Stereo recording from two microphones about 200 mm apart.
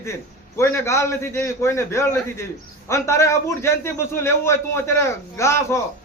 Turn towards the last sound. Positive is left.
turn(degrees=15)  # may be behind; listen again after turning